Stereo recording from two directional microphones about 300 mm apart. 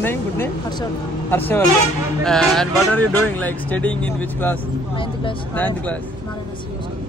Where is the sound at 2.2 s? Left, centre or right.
Centre.